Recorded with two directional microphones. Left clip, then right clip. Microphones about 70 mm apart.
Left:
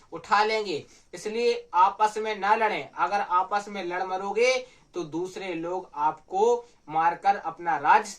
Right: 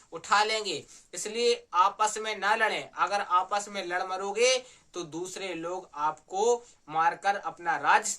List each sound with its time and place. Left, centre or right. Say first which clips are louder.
0.1 s speech: left 2 dB; right